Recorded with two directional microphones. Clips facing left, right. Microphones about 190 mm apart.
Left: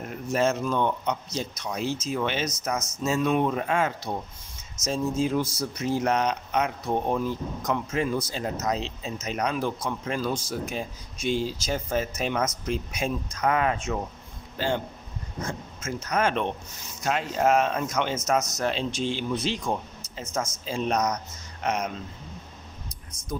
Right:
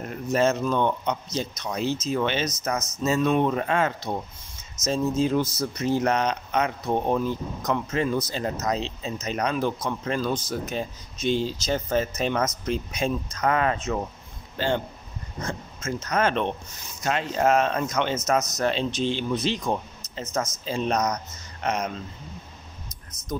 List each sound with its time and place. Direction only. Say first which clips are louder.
0.0 s speech: right 2 dB; 5° left (ahead or behind)
15.4 s speech: right 2 dB; 10° left (ahead or behind)